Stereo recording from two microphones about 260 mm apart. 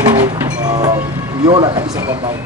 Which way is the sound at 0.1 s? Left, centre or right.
Centre.